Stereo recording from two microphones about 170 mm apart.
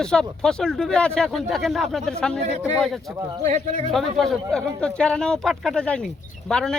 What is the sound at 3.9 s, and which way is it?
Speech, centre (ahead or behind).